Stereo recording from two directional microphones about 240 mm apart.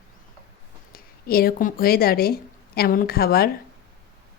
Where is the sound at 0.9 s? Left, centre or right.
Left.